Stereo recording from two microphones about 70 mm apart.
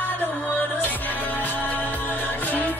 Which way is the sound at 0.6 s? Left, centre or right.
Left.